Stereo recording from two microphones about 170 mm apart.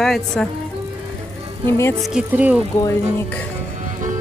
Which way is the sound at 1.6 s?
15° left (ahead or behind).